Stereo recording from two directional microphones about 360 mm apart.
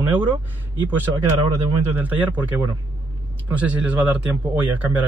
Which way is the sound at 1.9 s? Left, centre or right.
Centre.